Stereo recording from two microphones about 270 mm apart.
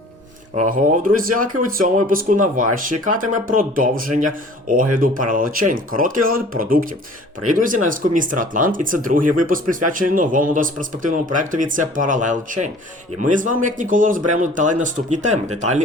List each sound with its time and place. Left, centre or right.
0.6 s speech: right